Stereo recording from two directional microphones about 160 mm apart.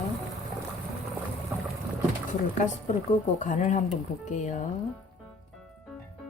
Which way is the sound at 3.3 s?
50° left (ahead or behind).